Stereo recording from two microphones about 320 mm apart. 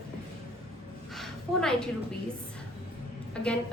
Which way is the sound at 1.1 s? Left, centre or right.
Centre.